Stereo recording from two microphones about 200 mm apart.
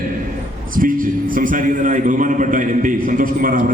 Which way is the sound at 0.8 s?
45° right (ahead or behind).